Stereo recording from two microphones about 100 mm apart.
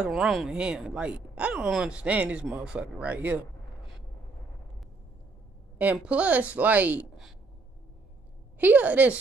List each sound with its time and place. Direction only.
0.0 s speech: 5° right (ahead or behind)
5.8 s speech: 15° right (ahead or behind)
8.5 s speech: 15° right (ahead or behind)